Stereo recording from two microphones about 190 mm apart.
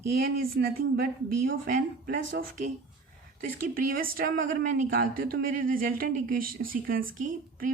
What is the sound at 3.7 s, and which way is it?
Speech, 50° right (ahead or behind).